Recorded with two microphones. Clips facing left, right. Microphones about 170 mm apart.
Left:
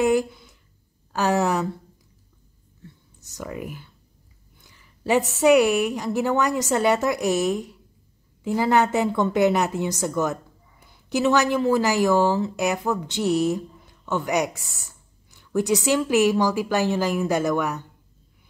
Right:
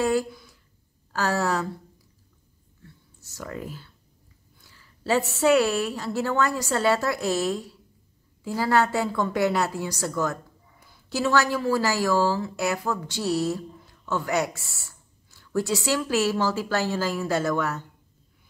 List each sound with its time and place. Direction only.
0.0 s a sound: 20° left (ahead or behind)
1.1 s a woman's voice: 20° left (ahead or behind)
3.2 s a woman's voice: 20° left (ahead or behind)